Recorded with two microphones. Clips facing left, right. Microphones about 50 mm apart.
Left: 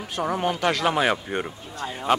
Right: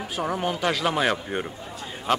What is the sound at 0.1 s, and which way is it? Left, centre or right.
A man's voice, centre.